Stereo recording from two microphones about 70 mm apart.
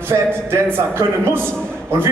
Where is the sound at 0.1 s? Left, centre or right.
Right.